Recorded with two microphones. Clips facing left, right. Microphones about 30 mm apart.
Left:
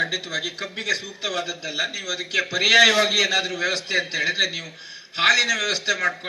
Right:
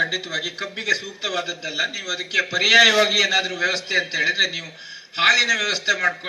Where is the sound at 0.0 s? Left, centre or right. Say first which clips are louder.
Right 2 dB; centre.